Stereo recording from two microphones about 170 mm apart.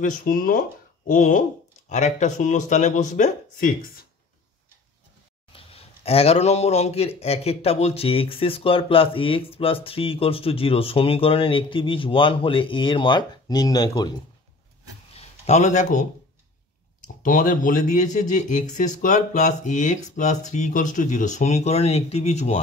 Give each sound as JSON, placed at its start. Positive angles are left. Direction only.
{"t": 0.0, "sound": "speech", "side_deg": 50}
{"t": 5.5, "sound": "speech", "side_deg": 35}
{"t": 15.1, "sound": "speech", "side_deg": 40}
{"t": 17.2, "sound": "speech", "side_deg": 50}